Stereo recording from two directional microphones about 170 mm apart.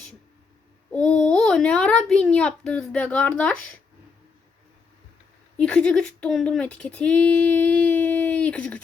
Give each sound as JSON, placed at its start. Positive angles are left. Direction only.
{"t": 0.9, "sound": "babbling", "side_deg": 5}
{"t": 1.3, "sound": "speech", "side_deg": 5}
{"t": 5.5, "sound": "speech", "side_deg": 5}